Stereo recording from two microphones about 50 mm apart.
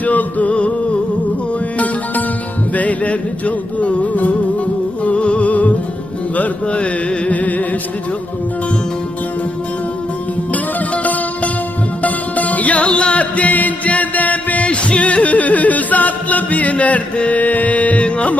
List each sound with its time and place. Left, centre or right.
0.0 s music: left
2.7 s music: left
10.5 s music: left